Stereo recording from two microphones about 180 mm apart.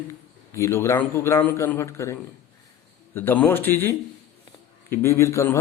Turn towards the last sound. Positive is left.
turn(degrees=15)  # may be behind; listen again after turning